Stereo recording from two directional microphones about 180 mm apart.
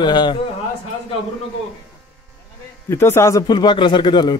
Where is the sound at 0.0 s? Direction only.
25° left (ahead or behind).